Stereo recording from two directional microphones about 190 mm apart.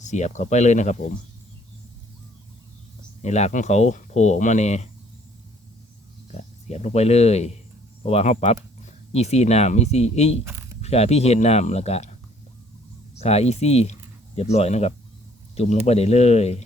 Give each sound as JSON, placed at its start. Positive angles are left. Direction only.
{"t": 0.0, "sound": "speech", "side_deg": 40}
{"t": 3.2, "sound": "speech", "side_deg": 35}
{"t": 6.3, "sound": "speech", "side_deg": 35}
{"t": 13.1, "sound": "speech", "side_deg": 35}